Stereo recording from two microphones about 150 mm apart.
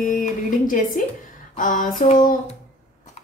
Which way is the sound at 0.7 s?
65° left (ahead or behind).